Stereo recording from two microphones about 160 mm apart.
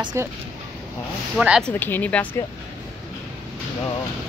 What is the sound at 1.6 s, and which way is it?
Speech, 10° left (ahead or behind).